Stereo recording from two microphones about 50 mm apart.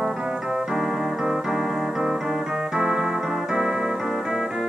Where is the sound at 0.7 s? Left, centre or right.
Centre.